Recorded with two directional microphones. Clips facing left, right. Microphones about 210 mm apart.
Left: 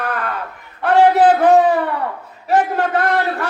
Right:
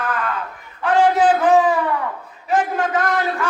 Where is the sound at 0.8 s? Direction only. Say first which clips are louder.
Left 3 dB; 65° left (ahead or behind).